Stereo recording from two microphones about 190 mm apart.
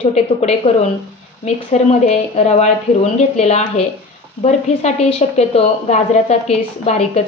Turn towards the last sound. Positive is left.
turn(degrees=35)  # may be behind; listen again after turning